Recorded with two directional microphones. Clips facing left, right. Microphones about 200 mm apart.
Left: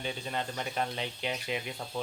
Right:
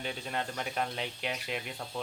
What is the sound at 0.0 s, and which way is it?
Speech, centre (ahead or behind).